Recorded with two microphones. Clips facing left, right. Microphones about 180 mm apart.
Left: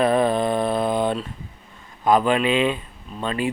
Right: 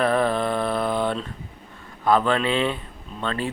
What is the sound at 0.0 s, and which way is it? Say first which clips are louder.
Mantra: left 2 dB; 15° left (ahead or behind).